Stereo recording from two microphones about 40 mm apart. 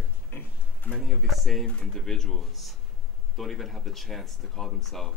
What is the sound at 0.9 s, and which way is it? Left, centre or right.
Speech, centre.